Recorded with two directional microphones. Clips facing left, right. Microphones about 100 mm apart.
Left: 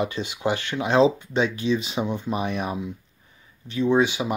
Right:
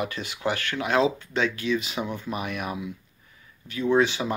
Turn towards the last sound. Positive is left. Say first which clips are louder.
# left 1 dB
turn(degrees=15)  # may be behind; listen again after turning